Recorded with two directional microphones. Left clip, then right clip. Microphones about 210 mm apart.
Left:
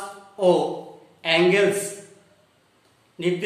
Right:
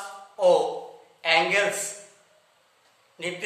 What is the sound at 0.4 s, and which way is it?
Speech, 15° right (ahead or behind).